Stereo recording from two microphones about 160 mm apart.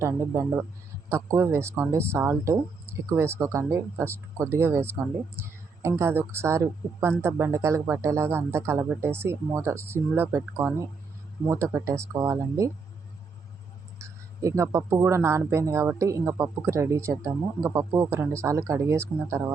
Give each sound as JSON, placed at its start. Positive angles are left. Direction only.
{"t": 0.0, "sound": "speech", "side_deg": -15}
{"t": 14.0, "sound": "speech", "side_deg": -20}